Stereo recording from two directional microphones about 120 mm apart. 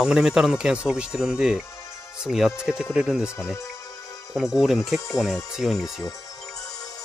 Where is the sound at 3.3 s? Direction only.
20° left (ahead or behind).